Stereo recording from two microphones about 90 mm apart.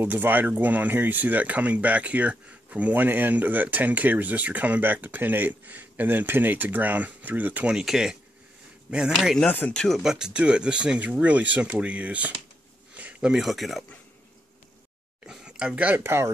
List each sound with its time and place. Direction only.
0.0 s speech: 20° right (ahead or behind); by 9.5 s centre (ahead or behind)
9.5 s speech: 15° left (ahead or behind)
9.8 s speech: 5° left (ahead or behind)
10.1 s speech: 10° right (ahead or behind)
12.9 s a sound: 15° right (ahead or behind)
13.3 s speech: centre (ahead or behind)
15.2 s speech: 5° right (ahead or behind); by 16.3 s 25° right (ahead or behind)